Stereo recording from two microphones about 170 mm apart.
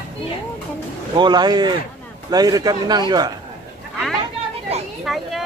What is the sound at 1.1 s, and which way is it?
A man's voice, 25° right (ahead or behind).